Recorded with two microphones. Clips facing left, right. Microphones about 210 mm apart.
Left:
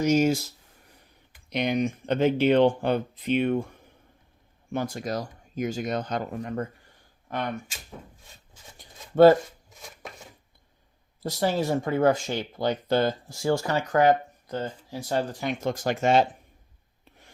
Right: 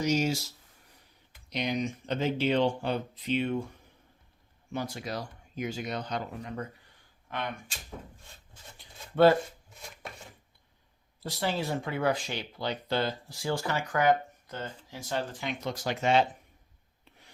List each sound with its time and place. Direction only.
0.0 s speech: 50° left (ahead or behind)
4.7 s speech: 50° left (ahead or behind)
8.8 s shuffling cards: 45° left (ahead or behind)
11.2 s speech: 45° left (ahead or behind)